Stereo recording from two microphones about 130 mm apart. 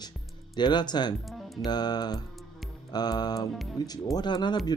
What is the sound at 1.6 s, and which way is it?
Speech, 30° left (ahead or behind).